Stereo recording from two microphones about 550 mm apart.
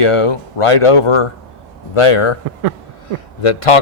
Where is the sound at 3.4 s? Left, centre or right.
Left.